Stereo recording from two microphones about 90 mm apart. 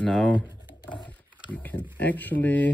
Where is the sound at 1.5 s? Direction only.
20° left (ahead or behind).